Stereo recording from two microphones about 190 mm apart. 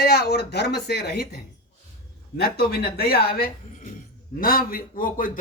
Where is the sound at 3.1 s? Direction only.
50° left (ahead or behind).